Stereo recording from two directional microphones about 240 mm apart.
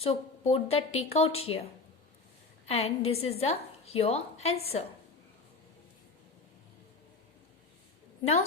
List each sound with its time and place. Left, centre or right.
0.0 s a woman's voice: left
2.6 s a woman's voice: left